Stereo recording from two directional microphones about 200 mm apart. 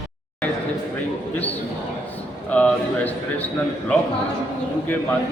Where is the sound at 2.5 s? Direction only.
5° left (ahead or behind).